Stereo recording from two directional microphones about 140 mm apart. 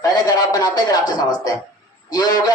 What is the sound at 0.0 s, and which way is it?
A man's voice, 25° left (ahead or behind).